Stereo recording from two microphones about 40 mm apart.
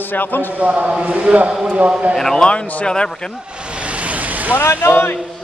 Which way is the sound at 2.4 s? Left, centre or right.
Left.